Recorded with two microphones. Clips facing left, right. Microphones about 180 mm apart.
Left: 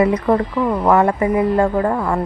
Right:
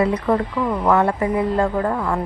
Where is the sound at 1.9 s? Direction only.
20° left (ahead or behind).